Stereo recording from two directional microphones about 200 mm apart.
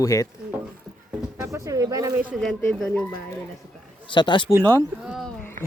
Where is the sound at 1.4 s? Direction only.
15° right (ahead or behind).